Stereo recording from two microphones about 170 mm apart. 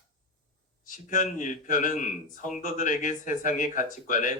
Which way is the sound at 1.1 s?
50° left (ahead or behind).